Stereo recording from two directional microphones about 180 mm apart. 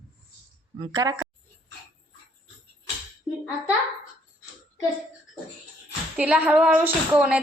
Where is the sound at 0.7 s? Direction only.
25° right (ahead or behind).